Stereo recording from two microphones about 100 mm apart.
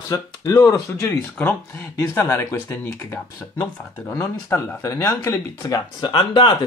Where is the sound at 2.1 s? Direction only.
30° left (ahead or behind).